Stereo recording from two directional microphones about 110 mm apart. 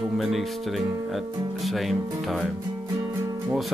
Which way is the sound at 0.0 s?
Centre (ahead or behind).